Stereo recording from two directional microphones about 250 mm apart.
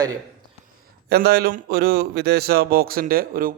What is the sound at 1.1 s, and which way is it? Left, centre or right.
Speech, right.